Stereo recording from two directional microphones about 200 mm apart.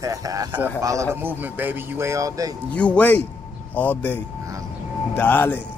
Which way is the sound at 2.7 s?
5° left (ahead or behind).